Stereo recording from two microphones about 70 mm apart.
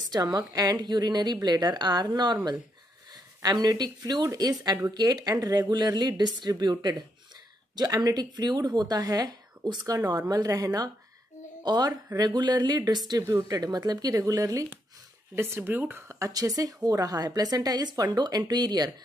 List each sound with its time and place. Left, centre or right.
0.1 s a woman's voice: right
3.1 s a woman's voice: right
11.6 s a woman's voice: right
12.2 s a woman's voice: right
13.3 s a woman's voice: right
15.3 s speech: right
16.1 s a woman's voice: right